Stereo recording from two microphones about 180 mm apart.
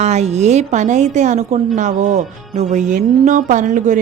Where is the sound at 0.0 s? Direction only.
40° right (ahead or behind).